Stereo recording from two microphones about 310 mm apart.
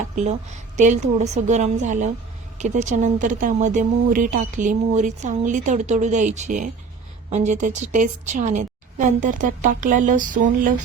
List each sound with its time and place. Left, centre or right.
0.2 s speech: right